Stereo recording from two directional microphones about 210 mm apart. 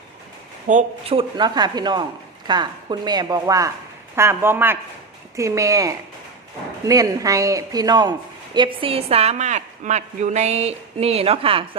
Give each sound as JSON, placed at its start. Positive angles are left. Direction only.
{"t": 0.7, "sound": "a woman's voice", "side_deg": -30}